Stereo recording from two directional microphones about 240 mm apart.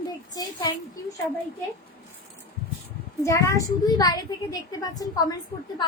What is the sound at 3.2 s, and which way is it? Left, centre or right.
A woman's voice, centre.